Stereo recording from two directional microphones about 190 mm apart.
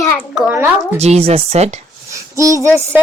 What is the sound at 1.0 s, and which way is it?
Speech, 35° right (ahead or behind).